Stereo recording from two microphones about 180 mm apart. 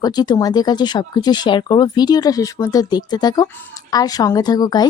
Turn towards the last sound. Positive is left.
turn(degrees=20)  # may be behind; listen again after turning